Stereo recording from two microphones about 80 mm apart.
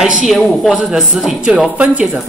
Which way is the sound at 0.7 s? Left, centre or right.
Centre.